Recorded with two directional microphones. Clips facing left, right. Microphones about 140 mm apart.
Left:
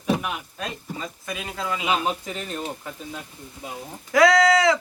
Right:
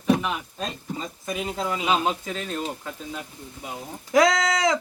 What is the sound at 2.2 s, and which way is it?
Speech, 15° left (ahead or behind).